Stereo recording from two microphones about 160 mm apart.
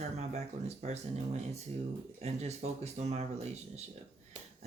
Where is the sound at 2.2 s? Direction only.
40° right (ahead or behind).